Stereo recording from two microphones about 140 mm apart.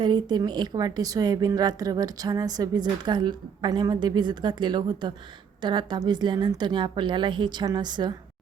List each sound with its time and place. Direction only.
0.0 s a woman's voice: 35° right (ahead or behind)